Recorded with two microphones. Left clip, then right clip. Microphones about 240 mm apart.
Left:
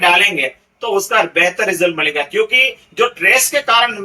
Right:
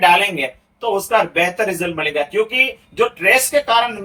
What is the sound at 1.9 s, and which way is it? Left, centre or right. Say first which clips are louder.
Speech: left 2 dB; centre.